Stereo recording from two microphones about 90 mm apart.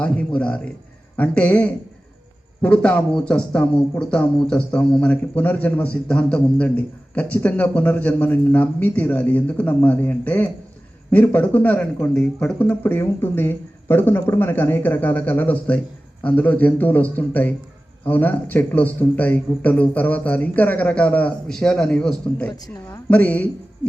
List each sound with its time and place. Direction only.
0.0 s a man's voice: 15° left (ahead or behind)